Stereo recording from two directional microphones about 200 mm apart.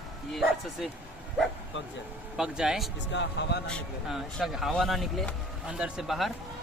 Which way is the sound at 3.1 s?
60° left (ahead or behind).